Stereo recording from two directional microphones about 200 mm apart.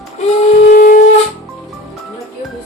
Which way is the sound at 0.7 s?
45° left (ahead or behind).